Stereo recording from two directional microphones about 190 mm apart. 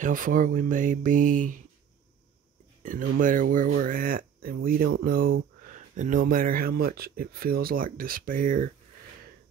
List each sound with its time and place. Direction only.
0.0 s speech: 45° right (ahead or behind)
2.8 s speech: 45° right (ahead or behind)